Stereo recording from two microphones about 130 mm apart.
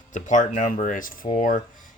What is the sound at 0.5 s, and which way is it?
Speech, 90° left.